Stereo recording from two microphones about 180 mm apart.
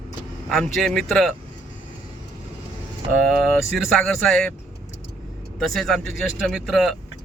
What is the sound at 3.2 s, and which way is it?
Speech, centre (ahead or behind).